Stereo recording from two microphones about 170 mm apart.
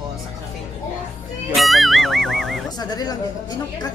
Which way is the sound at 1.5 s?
Centre (ahead or behind).